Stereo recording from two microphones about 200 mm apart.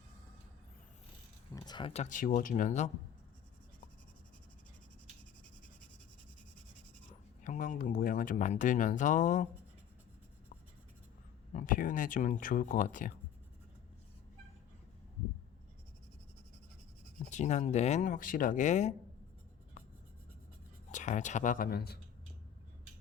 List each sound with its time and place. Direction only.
1.5 s speech: 20° left (ahead or behind); by 2.9 s 35° left (ahead or behind)
7.4 s speech: 40° left (ahead or behind)
11.5 s speech: 40° left (ahead or behind)
17.2 s speech: 35° left (ahead or behind)
20.9 s speech: 35° left (ahead or behind)